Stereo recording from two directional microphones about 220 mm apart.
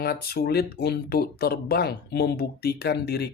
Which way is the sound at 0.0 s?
45° left (ahead or behind).